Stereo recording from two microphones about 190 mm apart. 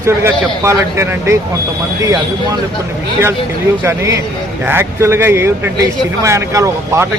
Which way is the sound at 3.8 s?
15° right (ahead or behind).